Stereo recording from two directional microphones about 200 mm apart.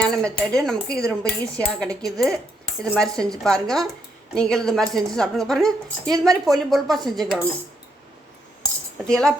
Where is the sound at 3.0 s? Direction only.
5° left (ahead or behind).